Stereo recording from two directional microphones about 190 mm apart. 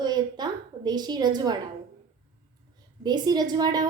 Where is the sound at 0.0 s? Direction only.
20° right (ahead or behind).